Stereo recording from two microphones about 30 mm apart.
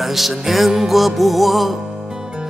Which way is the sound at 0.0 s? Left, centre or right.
Centre.